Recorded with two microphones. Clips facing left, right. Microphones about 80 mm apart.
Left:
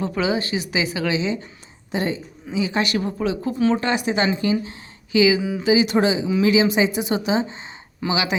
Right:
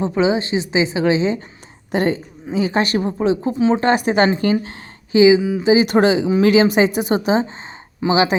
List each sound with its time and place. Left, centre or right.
0.0 s a woman's voice: right
1.9 s a woman's voice: right
3.8 s speech: right
5.1 s a woman's voice: right
5.4 s speech: centre
5.8 s a woman's voice: right